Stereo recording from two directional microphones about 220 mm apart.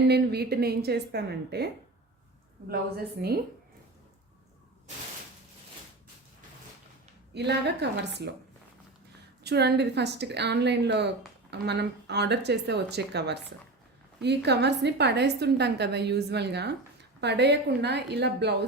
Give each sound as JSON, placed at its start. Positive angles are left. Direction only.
{"t": 0.1, "sound": "a woman's voice", "side_deg": -45}
{"t": 3.2, "sound": "a woman's voice", "side_deg": -45}
{"t": 7.3, "sound": "a woman's voice", "side_deg": -50}
{"t": 9.4, "sound": "a woman's voice", "side_deg": -50}